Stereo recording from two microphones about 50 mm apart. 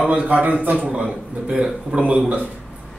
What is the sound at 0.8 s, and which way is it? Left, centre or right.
A man's voice, centre.